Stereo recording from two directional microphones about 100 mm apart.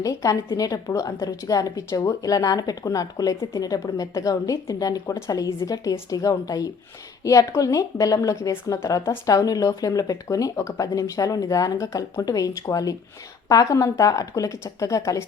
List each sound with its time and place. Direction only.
0.0 s a woman's voice: 35° left (ahead or behind)